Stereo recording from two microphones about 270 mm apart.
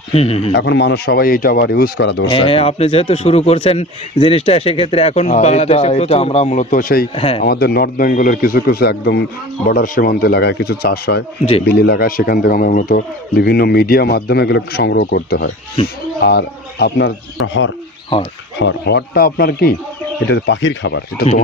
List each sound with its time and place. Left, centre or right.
0.1 s a man's voice: left
0.5 s speech: left
2.2 s a man's voice: left
7.2 s a man's voice: left
7.4 s speech: left
18.6 s speech: left